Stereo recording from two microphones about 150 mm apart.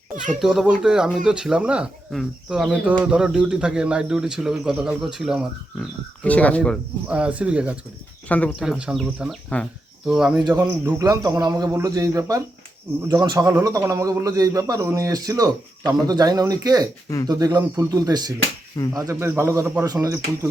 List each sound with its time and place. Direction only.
0.4 s speech: centre (ahead or behind)
6.2 s speech: 10° left (ahead or behind)
7.1 s speech: 10° right (ahead or behind)
10.4 s a man's voice: 15° right (ahead or behind)